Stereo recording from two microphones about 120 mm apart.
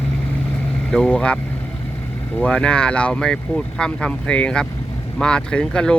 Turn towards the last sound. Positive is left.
turn(degrees=10)  # may be behind; listen again after turning